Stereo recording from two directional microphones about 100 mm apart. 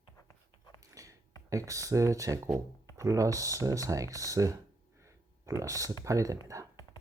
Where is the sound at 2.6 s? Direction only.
30° right (ahead or behind).